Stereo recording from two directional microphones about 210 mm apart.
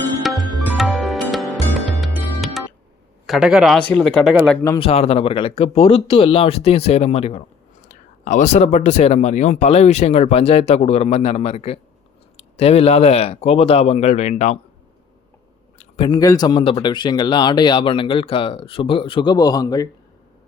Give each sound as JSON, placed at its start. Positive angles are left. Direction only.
{"t": 0.2, "sound": "music", "side_deg": 0}
{"t": 3.2, "sound": "speech", "side_deg": 0}
{"t": 4.6, "sound": "a man's voice", "side_deg": 15}
{"t": 4.9, "sound": "speech", "side_deg": 30}
{"t": 15.8, "sound": "speech", "side_deg": 25}